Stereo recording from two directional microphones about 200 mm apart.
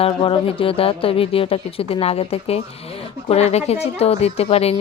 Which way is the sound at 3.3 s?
30° left (ahead or behind).